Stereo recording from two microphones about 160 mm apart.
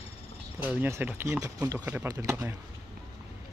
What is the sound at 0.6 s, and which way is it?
Speech, 10° right (ahead or behind).